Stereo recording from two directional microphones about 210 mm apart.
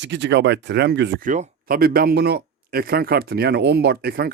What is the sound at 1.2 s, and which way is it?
Speech, 40° right (ahead or behind).